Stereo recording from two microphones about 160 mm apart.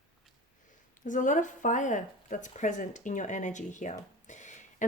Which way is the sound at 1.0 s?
50° left (ahead or behind).